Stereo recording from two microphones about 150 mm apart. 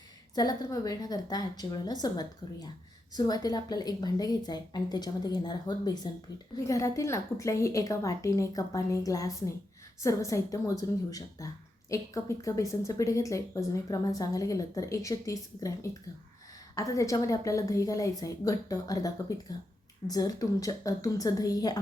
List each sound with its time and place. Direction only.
0.3 s speech: 25° left (ahead or behind)